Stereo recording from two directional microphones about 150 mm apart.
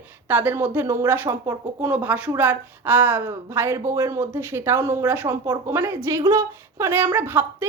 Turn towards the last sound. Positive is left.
turn(degrees=-15)  # may be behind; listen again after turning